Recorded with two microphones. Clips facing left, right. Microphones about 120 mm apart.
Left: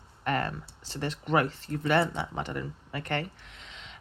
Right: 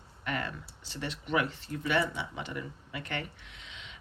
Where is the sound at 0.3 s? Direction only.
40° left (ahead or behind).